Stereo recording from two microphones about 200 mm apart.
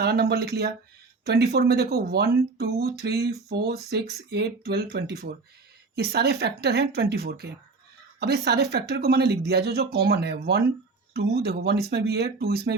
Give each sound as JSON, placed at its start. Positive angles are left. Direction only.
{"t": 0.0, "sound": "speech", "side_deg": -50}